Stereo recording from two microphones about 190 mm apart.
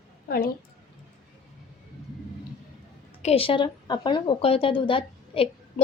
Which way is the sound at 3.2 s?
30° left (ahead or behind).